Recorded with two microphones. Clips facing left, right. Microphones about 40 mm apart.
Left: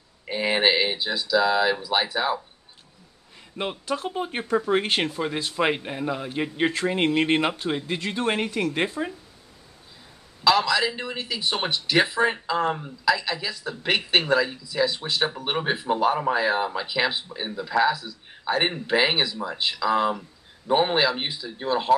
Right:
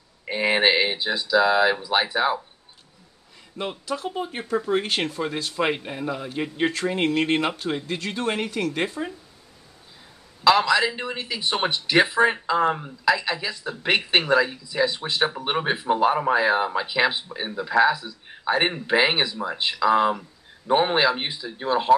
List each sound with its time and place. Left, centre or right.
0.2 s speech: centre
3.6 s a man's voice: centre
4.0 s speech: left
4.6 s speech: left
5.0 s a man's voice: centre
10.4 s speech: centre